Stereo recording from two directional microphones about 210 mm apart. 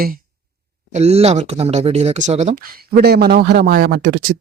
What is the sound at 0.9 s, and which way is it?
Speech, 30° right (ahead or behind).